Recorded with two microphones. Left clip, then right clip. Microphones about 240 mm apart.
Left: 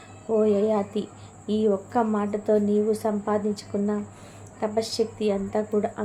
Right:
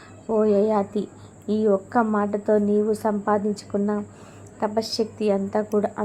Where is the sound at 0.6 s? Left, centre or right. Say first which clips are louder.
Right 2 dB; centre.